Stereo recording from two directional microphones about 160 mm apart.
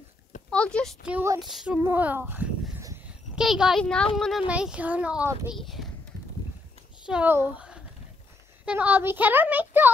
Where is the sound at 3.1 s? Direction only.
5° right (ahead or behind).